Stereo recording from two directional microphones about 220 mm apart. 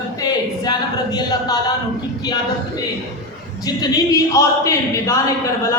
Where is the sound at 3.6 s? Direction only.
15° left (ahead or behind).